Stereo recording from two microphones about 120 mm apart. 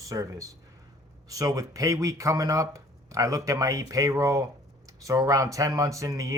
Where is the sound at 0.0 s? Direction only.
30° right (ahead or behind).